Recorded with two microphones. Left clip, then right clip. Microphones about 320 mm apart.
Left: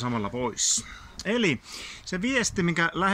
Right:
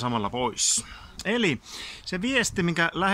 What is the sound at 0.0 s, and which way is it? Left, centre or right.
Speech, centre.